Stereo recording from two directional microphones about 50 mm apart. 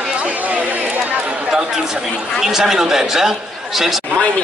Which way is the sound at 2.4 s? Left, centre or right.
Centre.